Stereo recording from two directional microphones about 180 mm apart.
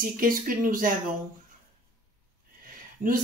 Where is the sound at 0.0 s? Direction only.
50° right (ahead or behind).